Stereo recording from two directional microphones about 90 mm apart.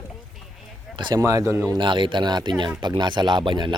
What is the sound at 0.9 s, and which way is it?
Speech, 55° right (ahead or behind).